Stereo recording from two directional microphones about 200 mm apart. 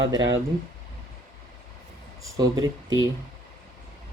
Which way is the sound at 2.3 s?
20° right (ahead or behind).